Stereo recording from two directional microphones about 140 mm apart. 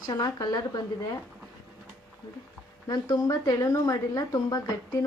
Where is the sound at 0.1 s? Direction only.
30° left (ahead or behind).